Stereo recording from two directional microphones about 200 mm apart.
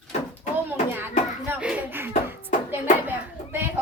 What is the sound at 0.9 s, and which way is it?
A child's voice, 10° right (ahead or behind).